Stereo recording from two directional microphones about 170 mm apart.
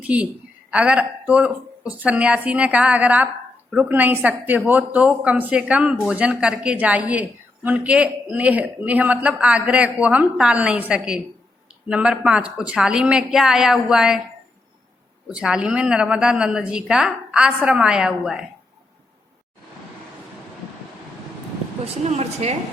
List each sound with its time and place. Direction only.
0.0 s a woman's voice: 10° right (ahead or behind)
15.3 s a woman's voice: 5° right (ahead or behind)
21.8 s speech: 40° right (ahead or behind)